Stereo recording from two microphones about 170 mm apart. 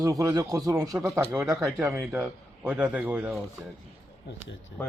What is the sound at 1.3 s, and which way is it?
Speech, centre (ahead or behind).